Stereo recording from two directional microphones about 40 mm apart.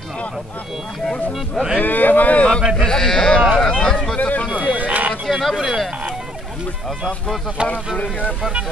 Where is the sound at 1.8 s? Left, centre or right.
Left.